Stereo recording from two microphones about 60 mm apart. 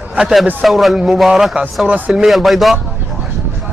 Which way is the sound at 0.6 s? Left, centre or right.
Centre.